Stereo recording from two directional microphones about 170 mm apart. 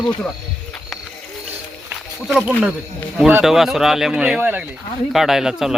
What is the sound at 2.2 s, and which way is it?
Speech, 5° right (ahead or behind).